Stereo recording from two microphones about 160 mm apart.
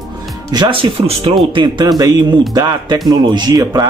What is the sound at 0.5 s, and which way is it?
Speech, 30° right (ahead or behind).